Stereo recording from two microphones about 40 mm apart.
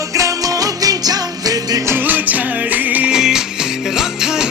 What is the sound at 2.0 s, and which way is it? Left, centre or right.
Music, right.